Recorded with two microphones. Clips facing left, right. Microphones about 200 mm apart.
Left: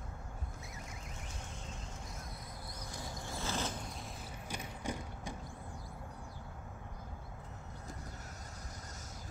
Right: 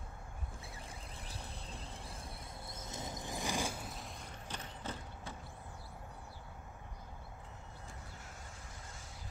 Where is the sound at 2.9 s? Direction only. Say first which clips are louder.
Right 2 dB; 20° right (ahead or behind).